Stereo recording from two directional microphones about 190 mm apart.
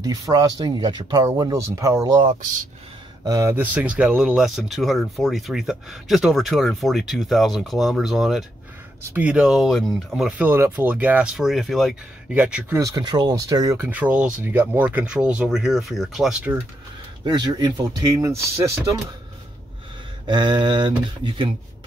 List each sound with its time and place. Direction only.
0.0 s speech: 20° right (ahead or behind)
3.3 s speech: 15° right (ahead or behind)
17.2 s speech: 20° right (ahead or behind)
20.2 s speech: 25° right (ahead or behind)